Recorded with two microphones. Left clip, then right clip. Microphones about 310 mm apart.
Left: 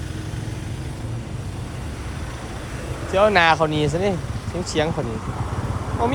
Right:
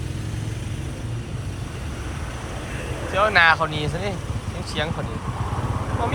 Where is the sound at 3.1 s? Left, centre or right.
Left.